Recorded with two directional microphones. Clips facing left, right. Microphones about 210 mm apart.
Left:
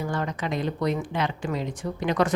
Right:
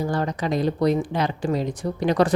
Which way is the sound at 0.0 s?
35° right (ahead or behind).